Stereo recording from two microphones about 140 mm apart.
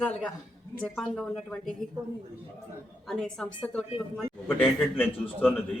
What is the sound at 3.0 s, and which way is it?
A man's voice, 5° left (ahead or behind).